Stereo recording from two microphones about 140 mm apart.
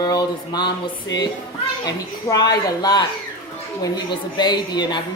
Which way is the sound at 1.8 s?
30° left (ahead or behind).